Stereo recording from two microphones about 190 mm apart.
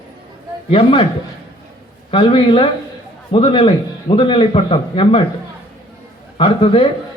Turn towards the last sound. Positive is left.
turn(degrees=25)  # may be behind; listen again after turning